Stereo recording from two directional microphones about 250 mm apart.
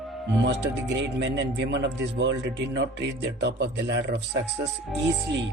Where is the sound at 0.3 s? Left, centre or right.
Right.